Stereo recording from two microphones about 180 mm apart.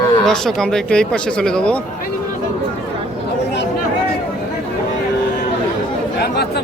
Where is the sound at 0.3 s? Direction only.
5° left (ahead or behind).